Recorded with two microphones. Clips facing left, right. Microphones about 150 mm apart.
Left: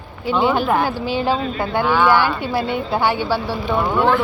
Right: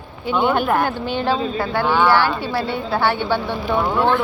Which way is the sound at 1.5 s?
20° left (ahead or behind).